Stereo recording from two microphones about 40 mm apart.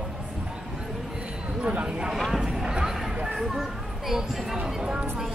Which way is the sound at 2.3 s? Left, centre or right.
Centre.